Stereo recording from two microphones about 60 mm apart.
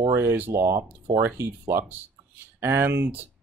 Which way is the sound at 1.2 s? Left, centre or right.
Right.